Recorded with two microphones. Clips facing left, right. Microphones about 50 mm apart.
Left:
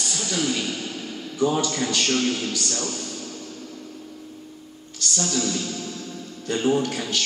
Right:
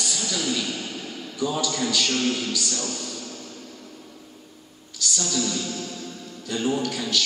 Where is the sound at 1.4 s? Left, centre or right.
Left.